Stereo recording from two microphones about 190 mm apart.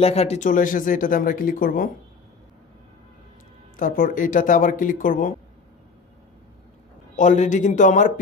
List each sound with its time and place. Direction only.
0.0 s speech: 35° left (ahead or behind)
3.7 s speech: 45° left (ahead or behind)
7.2 s speech: 40° left (ahead or behind)